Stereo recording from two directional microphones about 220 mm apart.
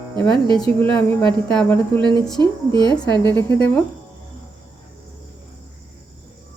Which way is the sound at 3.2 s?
10° left (ahead or behind).